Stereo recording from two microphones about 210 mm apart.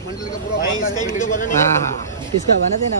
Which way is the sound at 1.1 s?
40° left (ahead or behind).